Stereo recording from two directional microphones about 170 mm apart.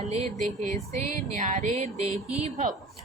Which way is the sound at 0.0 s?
40° right (ahead or behind).